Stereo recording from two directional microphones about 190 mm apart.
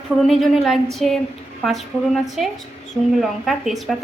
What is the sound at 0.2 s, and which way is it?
A woman's voice, centre (ahead or behind).